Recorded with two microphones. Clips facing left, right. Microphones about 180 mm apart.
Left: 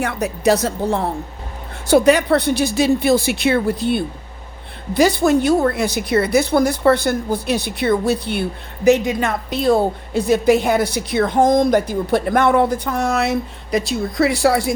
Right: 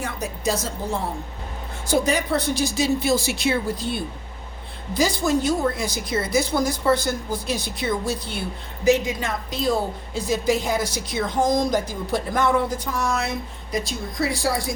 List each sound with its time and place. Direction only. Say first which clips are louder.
0.0 s a woman's voice: left 8 dB; 65° left (ahead or behind)